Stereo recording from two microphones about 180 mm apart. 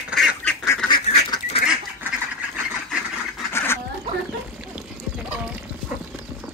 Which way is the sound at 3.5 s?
15° left (ahead or behind).